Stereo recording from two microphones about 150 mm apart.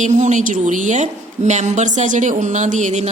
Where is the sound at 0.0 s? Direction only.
55° right (ahead or behind).